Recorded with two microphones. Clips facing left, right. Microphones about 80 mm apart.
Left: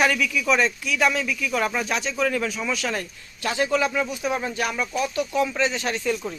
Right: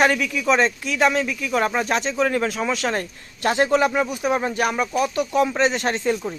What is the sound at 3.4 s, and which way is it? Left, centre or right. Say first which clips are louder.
Speech: right 5 dB; right.